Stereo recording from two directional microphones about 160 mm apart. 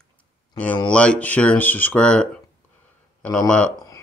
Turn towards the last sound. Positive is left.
turn(degrees=20)  # may be behind; listen again after turning